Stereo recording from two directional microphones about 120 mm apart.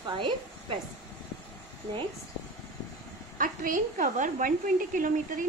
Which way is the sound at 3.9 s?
90° right.